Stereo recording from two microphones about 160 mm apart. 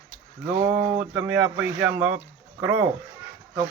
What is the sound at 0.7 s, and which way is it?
Speech, 5° right (ahead or behind).